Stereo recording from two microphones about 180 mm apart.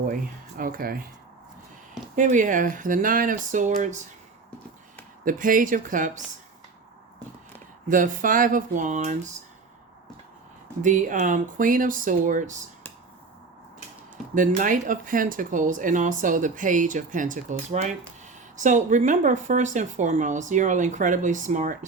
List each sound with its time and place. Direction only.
0.1 s speech: 50° right (ahead or behind)
2.1 s speech: 45° right (ahead or behind)
5.2 s speech: 50° right (ahead or behind)
7.9 s speech: 45° right (ahead or behind)
10.8 s speech: 45° right (ahead or behind)
14.3 s speech: 45° right (ahead or behind)